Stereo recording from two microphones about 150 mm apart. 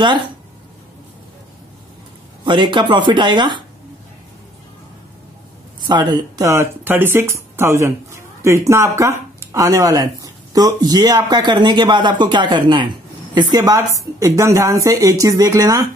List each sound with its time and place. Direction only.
2.4 s speech: 30° right (ahead or behind)
5.8 s speech: 30° right (ahead or behind)